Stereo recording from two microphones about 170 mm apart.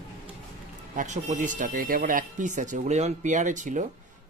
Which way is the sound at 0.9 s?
45° right (ahead or behind).